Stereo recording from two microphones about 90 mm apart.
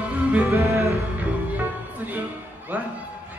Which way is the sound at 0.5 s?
35° right (ahead or behind).